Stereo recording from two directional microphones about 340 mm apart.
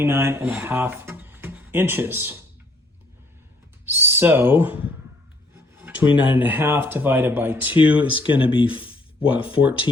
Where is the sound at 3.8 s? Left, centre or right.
Centre.